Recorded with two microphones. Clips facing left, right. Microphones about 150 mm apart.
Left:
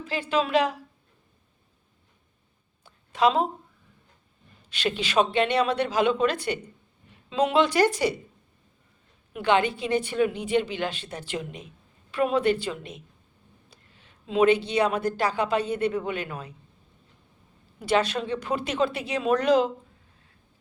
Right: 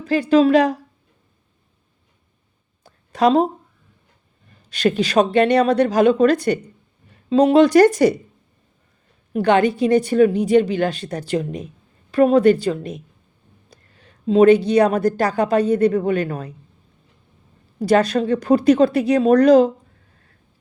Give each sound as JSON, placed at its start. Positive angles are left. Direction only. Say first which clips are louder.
{"t": 0.0, "sound": "a woman's voice", "louder": "right 12 dB", "side_deg": -40}
{"t": 2.8, "sound": "a sound", "louder": "right 5 dB", "side_deg": -40}
{"t": 4.7, "sound": "a woman's voice", "louder": "right 8 dB", "side_deg": -40}
{"t": 9.3, "sound": "a woman's voice", "louder": "right 7 dB", "side_deg": -45}
{"t": 17.7, "sound": "a woman's voice", "louder": "right 8 dB", "side_deg": -40}